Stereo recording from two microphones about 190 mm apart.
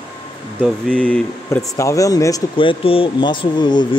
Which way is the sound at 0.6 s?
5° left (ahead or behind).